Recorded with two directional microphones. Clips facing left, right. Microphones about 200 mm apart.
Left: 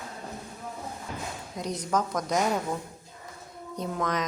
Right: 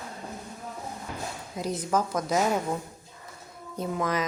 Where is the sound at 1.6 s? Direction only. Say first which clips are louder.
Right 1 dB; 5° right (ahead or behind).